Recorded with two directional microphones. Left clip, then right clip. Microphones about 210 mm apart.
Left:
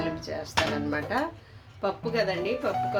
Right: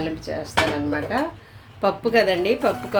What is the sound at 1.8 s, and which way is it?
Speech, 20° right (ahead or behind).